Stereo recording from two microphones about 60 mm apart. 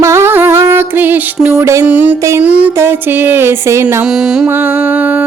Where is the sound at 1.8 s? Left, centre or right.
Right.